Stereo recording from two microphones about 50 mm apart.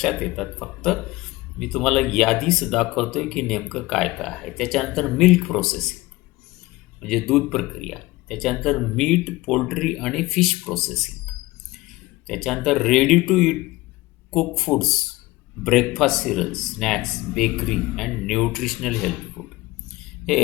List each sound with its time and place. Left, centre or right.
0.0 s speech: centre
7.0 s speech: centre
12.3 s speech: centre
20.0 s a sound: centre